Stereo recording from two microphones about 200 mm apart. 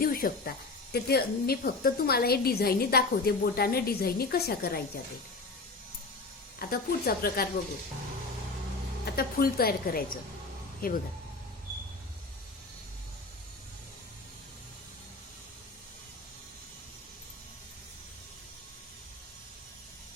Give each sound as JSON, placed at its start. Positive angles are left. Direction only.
{"t": 0.0, "sound": "a woman's voice", "side_deg": 45}
{"t": 6.6, "sound": "a woman's voice", "side_deg": 50}
{"t": 9.0, "sound": "a woman's voice", "side_deg": 50}